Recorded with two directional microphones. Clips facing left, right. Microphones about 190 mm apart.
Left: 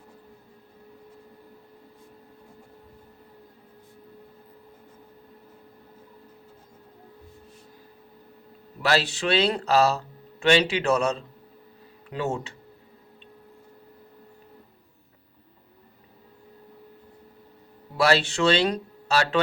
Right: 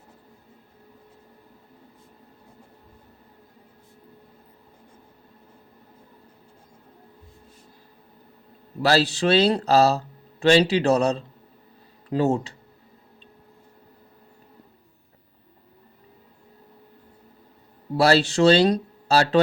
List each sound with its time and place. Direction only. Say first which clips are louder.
8.8 s speech: right 4 dB; 35° right (ahead or behind)
17.9 s speech: right 4 dB; 35° right (ahead or behind)